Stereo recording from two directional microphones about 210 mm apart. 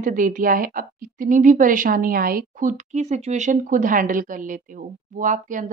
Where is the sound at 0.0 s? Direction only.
40° right (ahead or behind).